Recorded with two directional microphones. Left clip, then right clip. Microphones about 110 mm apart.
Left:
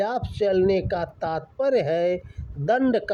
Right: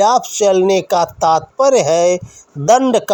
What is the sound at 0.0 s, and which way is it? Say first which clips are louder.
Speech: right 12 dB; 30° right (ahead or behind).